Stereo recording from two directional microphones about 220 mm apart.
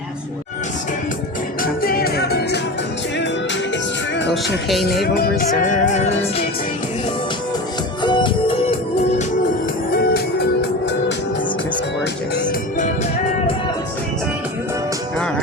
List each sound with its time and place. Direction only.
1.8 s music: 45° left (ahead or behind)
5.1 s music: 45° left (ahead or behind)
8.0 s music: 20° left (ahead or behind)
9.9 s music: 45° left (ahead or behind)
12.5 s music: 35° left (ahead or behind)